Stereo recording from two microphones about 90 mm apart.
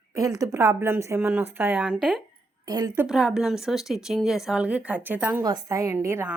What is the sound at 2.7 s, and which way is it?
Speech, 45° right (ahead or behind).